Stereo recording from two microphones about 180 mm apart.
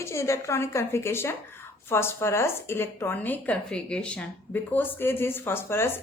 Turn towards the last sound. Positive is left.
turn(degrees=15)  # may be behind; listen again after turning